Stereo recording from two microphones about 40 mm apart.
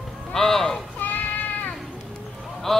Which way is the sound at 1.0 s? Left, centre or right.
Left.